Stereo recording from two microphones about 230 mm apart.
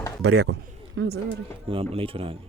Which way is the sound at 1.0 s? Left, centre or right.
Right.